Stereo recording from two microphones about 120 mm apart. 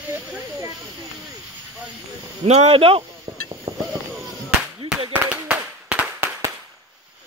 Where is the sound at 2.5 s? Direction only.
65° right (ahead or behind).